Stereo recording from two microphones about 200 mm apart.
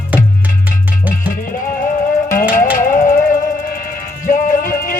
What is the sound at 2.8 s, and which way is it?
Music, 40° left (ahead or behind).